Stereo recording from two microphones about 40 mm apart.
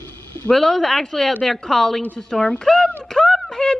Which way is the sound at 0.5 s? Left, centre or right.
Centre.